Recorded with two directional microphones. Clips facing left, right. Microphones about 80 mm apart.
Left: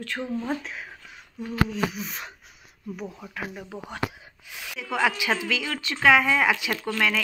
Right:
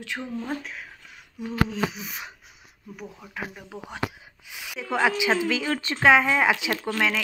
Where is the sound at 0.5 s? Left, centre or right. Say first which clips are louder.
Left 2 dB; centre.